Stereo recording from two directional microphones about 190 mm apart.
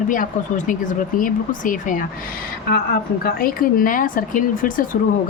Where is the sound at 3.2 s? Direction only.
50° left (ahead or behind).